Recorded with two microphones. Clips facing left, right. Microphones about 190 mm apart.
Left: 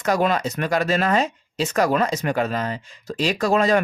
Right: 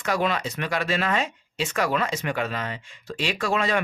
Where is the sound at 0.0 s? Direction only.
45° left (ahead or behind).